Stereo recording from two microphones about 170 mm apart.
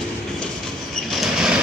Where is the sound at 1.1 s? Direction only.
Centre (ahead or behind).